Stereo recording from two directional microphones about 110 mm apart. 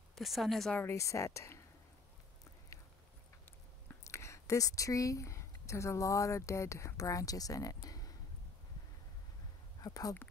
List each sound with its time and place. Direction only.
0.1 s speech: centre (ahead or behind)
0.7 s speech: 25° left (ahead or behind)
4.0 s speech: 25° left (ahead or behind)
9.8 s speech: 35° left (ahead or behind)